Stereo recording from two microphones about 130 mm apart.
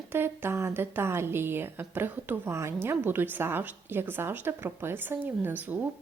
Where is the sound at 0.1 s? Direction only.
15° right (ahead or behind).